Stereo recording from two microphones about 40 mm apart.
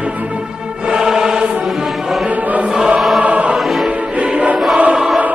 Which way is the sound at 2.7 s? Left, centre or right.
Right.